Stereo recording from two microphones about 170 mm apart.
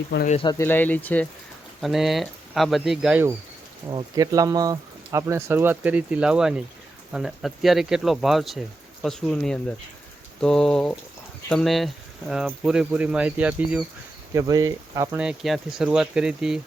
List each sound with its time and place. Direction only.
0.1 s speech: 80° left
0.6 s speech: 10° left (ahead or behind)
1.8 s speech: centre (ahead or behind)
3.8 s speech: 20° right (ahead or behind)
14.3 s speech: 20° right (ahead or behind)
15.2 s speech: 5° right (ahead or behind)